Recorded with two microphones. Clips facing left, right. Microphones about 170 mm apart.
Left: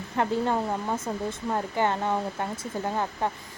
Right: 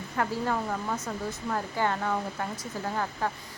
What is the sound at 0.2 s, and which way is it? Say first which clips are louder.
Speech: left 4 dB; 25° left (ahead or behind).